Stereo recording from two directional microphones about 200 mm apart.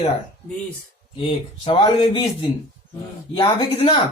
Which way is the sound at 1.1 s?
25° left (ahead or behind).